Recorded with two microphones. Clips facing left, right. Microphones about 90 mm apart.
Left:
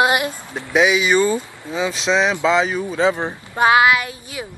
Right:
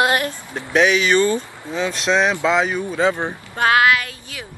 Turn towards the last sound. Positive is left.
turn(degrees=20)  # may be behind; listen again after turning